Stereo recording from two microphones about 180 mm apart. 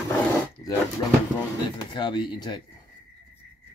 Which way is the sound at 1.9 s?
25° left (ahead or behind).